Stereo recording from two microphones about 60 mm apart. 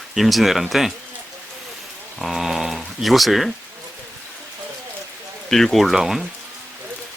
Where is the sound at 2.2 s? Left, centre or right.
Centre.